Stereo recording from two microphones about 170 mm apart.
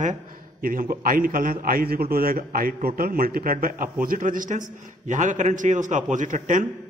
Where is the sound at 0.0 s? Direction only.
50° right (ahead or behind).